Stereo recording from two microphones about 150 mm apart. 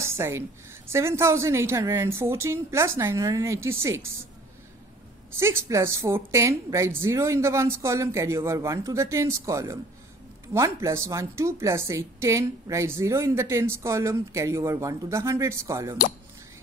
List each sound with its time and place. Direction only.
0.0 s a woman's voice: 20° right (ahead or behind)
5.3 s a woman's voice: 15° right (ahead or behind)